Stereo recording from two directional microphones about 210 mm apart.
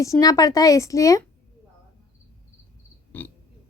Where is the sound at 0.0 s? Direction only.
15° left (ahead or behind).